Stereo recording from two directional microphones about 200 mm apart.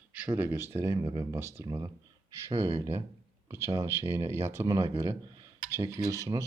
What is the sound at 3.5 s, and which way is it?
Speech, 15° right (ahead or behind).